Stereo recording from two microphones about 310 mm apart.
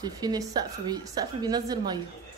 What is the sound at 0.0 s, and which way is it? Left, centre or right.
A woman's voice, centre.